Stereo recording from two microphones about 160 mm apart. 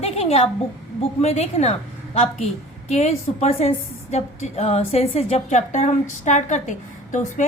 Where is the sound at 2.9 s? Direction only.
45° left (ahead or behind).